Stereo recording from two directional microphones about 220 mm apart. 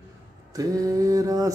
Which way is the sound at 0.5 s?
15° right (ahead or behind).